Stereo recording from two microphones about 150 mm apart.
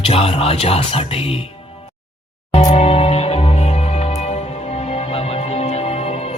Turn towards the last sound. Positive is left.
turn(degrees=40)  # may be behind; listen again after turning